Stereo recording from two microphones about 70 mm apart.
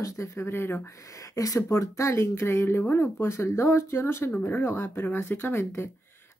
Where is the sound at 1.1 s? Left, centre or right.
Left.